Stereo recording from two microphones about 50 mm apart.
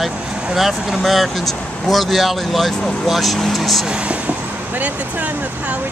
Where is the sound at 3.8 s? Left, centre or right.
Right.